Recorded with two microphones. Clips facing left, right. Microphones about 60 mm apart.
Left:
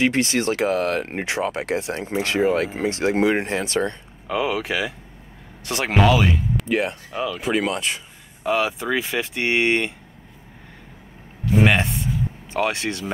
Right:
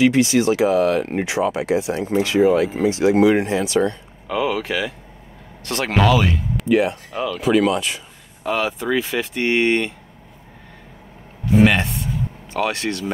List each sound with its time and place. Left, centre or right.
0.0 s speech: left
4.3 s speech: centre
7.3 s speech: left
8.5 s speech: centre
11.6 s a sound: centre
12.5 s speech: centre